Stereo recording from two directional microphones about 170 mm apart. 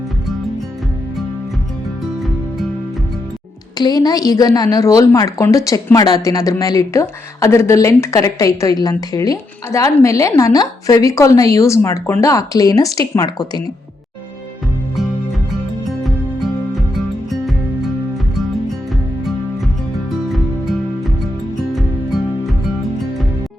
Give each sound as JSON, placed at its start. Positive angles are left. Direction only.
{"t": 3.8, "sound": "a woman's voice", "side_deg": 25}
{"t": 18.9, "sound": "music", "side_deg": 0}